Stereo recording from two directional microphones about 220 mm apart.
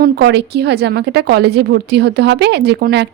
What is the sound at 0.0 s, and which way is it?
Speech, 50° right (ahead or behind).